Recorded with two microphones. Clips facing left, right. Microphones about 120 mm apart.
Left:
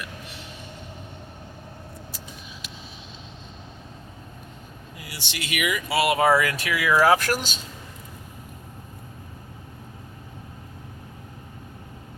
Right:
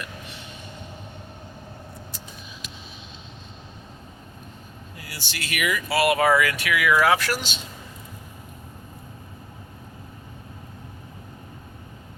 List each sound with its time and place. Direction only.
5.0 s speech: 20° left (ahead or behind); by 7.6 s 45° left (ahead or behind)